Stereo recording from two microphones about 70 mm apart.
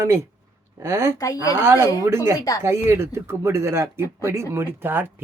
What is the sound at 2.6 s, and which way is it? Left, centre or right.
Speech, right.